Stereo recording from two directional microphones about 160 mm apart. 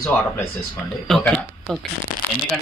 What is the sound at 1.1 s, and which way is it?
Speech, centre (ahead or behind).